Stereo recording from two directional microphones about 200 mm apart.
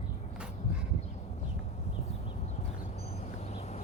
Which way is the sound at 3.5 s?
35° left (ahead or behind).